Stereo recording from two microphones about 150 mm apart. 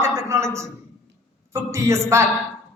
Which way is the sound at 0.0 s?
20° right (ahead or behind).